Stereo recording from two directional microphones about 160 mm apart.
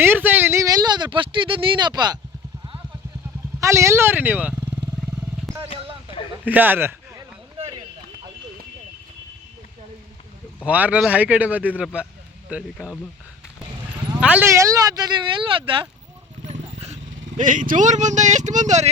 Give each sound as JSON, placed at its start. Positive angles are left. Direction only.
{"t": 0.0, "sound": "a sound", "side_deg": -10}
{"t": 3.6, "sound": "speech", "side_deg": -20}
{"t": 6.4, "sound": "speech", "side_deg": -10}
{"t": 10.7, "sound": "speech", "side_deg": -10}
{"t": 14.2, "sound": "speech", "side_deg": -10}
{"t": 16.5, "sound": "speech", "side_deg": -40}